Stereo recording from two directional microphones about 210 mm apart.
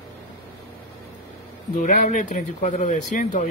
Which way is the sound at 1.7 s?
35° left (ahead or behind).